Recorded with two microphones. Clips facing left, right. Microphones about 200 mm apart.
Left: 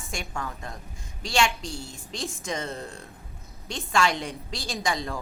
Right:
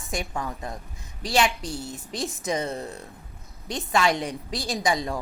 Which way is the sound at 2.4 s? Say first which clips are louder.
Right 6 dB; 20° right (ahead or behind).